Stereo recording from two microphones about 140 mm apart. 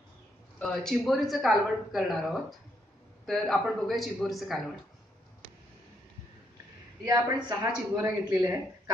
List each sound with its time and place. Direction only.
0.6 s speech: 5° left (ahead or behind)
7.4 s a woman's voice: 25° right (ahead or behind)